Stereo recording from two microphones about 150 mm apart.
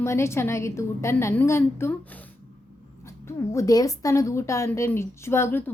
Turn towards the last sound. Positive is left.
turn(degrees=15)  # may be behind; listen again after turning